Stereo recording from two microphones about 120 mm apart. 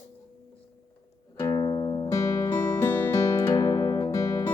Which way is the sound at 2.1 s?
25° left (ahead or behind).